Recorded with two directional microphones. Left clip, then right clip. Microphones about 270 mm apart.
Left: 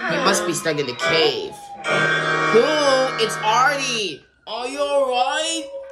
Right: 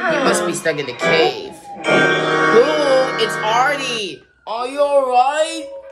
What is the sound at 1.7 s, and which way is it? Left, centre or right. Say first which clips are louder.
Speech: right 5 dB; right.